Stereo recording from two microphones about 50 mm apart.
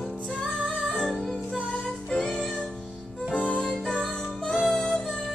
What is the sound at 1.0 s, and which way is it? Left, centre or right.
Music, centre.